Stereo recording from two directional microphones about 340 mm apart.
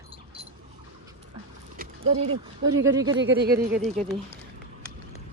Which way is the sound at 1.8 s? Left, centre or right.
Centre.